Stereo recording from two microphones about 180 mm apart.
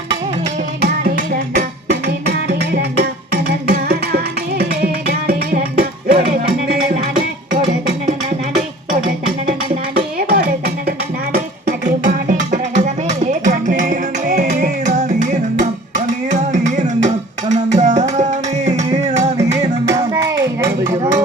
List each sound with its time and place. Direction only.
1.5 s music: 65° right (ahead or behind)
9.9 s music: 60° right (ahead or behind)
12.0 s music: 45° right (ahead or behind)
17.5 s tabla: 40° right (ahead or behind)
19.0 s music: 40° right (ahead or behind)
19.4 s music: 15° right (ahead or behind)